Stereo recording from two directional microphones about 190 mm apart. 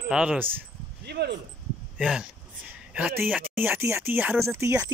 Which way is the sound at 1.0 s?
60° right (ahead or behind).